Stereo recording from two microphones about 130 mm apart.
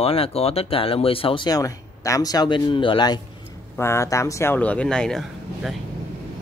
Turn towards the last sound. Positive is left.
turn(degrees=0)  # may be behind; listen again after turning